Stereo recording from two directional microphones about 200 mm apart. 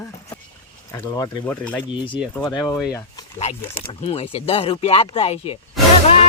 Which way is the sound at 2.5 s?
20° left (ahead or behind).